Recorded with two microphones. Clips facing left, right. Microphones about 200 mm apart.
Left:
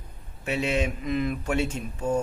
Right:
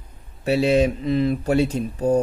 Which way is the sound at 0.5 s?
35° right (ahead or behind).